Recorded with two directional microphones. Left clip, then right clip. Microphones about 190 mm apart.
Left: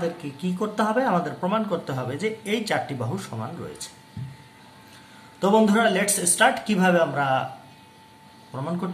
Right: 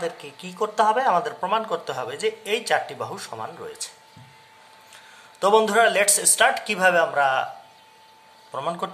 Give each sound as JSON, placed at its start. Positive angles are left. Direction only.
{"t": 0.0, "sound": "speech", "side_deg": -30}
{"t": 5.4, "sound": "speech", "side_deg": -35}
{"t": 8.5, "sound": "speech", "side_deg": -40}